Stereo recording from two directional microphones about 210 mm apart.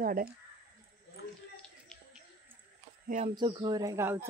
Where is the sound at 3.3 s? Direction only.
20° right (ahead or behind).